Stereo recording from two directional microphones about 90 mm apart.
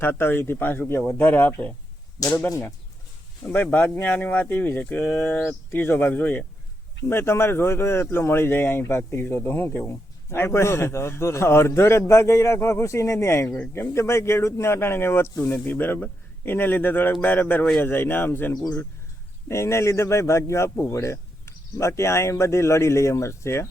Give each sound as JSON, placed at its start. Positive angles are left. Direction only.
{"t": 0.0, "sound": "speech", "side_deg": 25}
{"t": 3.4, "sound": "speech", "side_deg": 20}